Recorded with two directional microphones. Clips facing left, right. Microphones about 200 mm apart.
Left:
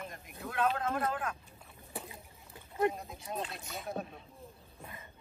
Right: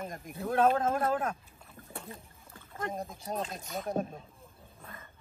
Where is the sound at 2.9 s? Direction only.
45° right (ahead or behind).